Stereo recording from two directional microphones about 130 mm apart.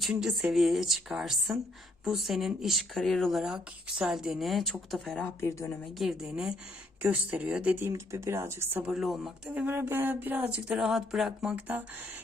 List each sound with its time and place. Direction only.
0.0 s speech: 5° right (ahead or behind)
5.4 s speech: 20° left (ahead or behind)
6.0 s speech: 5° right (ahead or behind)
7.9 s speech: 20° right (ahead or behind)
8.9 s speech: centre (ahead or behind)
9.6 s speech: 15° right (ahead or behind)